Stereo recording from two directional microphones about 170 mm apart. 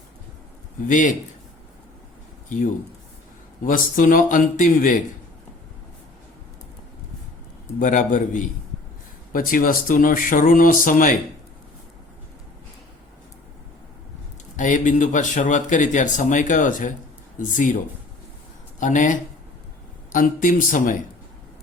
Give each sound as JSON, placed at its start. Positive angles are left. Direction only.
{"t": 0.9, "sound": "speech", "side_deg": 50}
{"t": 3.6, "sound": "speech", "side_deg": 50}
{"t": 7.8, "sound": "speech", "side_deg": 50}
{"t": 14.5, "sound": "speech", "side_deg": 50}
{"t": 18.8, "sound": "speech", "side_deg": 45}